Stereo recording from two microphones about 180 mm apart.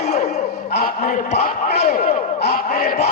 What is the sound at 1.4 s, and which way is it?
Speech, 50° left (ahead or behind).